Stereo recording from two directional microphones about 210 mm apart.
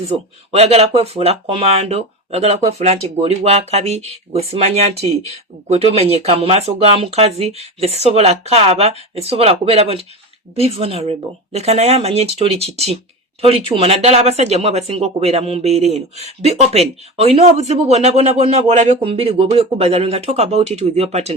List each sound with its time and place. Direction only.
0.5 s speech: 30° right (ahead or behind)